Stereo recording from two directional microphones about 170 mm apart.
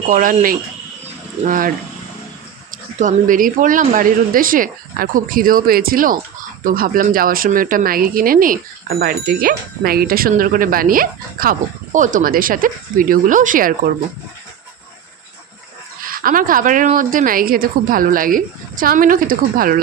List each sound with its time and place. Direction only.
0.1 s speech: 50° right (ahead or behind)
3.0 s speech: 50° right (ahead or behind)
16.2 s speech: 55° right (ahead or behind)